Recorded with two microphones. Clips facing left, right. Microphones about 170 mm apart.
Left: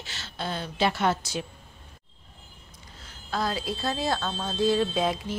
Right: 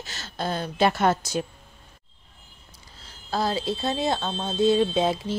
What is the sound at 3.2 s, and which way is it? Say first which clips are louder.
Speech: right 3 dB; 30° right (ahead or behind).